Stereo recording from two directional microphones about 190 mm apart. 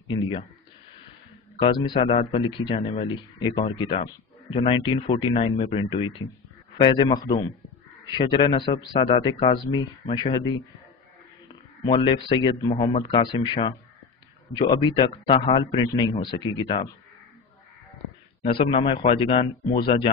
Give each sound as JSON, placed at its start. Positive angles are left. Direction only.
{"t": 0.1, "sound": "a man's voice", "side_deg": 30}
{"t": 1.6, "sound": "a man's voice", "side_deg": 25}
{"t": 18.4, "sound": "a man's voice", "side_deg": 30}